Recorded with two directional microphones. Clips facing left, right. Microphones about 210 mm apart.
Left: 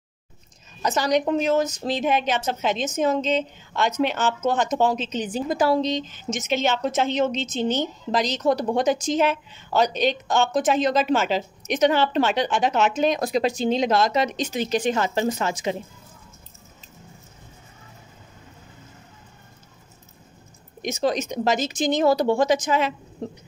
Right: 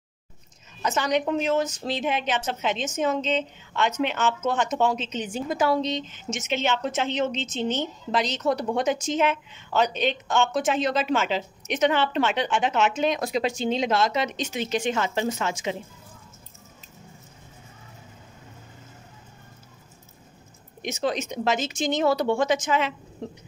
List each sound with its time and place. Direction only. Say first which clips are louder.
0.8 s a woman's voice: left 3 dB; 35° left (ahead or behind)
20.8 s a woman's voice: left 3 dB; 40° left (ahead or behind)